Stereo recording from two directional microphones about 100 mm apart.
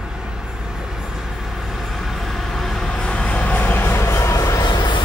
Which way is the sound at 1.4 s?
Centre (ahead or behind).